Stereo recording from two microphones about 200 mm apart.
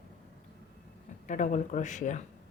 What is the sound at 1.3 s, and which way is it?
Speech, 40° left (ahead or behind).